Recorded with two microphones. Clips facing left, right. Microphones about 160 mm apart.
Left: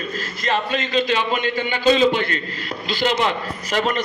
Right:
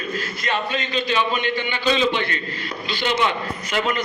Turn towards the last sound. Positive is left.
turn(degrees=40)  # may be behind; listen again after turning